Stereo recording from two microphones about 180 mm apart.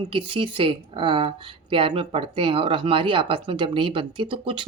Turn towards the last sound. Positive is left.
turn(degrees=-30)  # may be behind; listen again after turning